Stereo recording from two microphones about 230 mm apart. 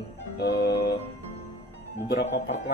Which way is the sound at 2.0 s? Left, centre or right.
Left.